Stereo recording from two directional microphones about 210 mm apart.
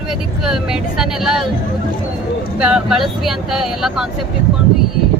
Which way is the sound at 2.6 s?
5° right (ahead or behind).